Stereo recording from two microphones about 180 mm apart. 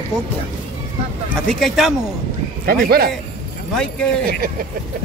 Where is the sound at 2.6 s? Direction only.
60° right (ahead or behind).